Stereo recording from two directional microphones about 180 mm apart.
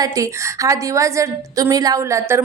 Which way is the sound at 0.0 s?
20° right (ahead or behind).